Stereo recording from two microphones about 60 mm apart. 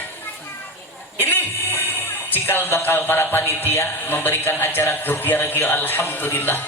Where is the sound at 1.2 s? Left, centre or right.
Left.